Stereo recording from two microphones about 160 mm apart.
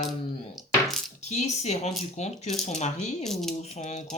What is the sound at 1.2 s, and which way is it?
Speech, 45° left (ahead or behind).